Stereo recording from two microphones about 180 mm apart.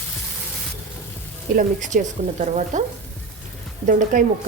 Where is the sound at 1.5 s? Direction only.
45° right (ahead or behind).